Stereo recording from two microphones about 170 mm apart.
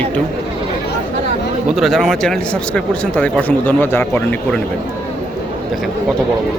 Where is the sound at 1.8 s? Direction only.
Centre (ahead or behind).